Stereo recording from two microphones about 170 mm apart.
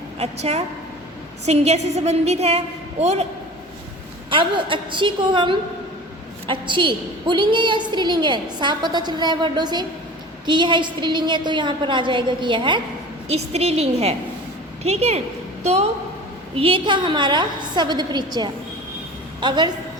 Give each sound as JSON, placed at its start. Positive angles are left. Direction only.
{"t": 0.2, "sound": "a woman's voice", "side_deg": -40}
{"t": 4.3, "sound": "a woman's voice", "side_deg": -30}